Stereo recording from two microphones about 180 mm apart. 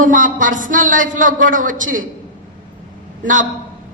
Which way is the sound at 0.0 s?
45° right (ahead or behind).